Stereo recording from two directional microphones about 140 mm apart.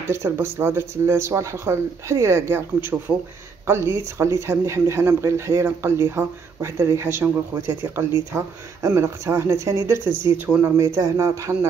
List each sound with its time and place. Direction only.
0.1 s speech: 15° right (ahead or behind)